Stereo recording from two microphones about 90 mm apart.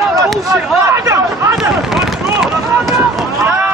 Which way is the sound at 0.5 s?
30° right (ahead or behind).